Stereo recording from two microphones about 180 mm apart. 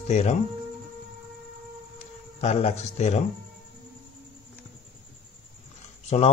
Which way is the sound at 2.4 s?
35° left (ahead or behind).